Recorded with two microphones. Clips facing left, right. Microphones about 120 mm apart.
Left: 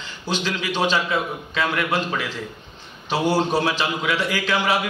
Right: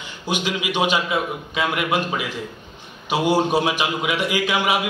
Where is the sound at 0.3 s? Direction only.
15° right (ahead or behind).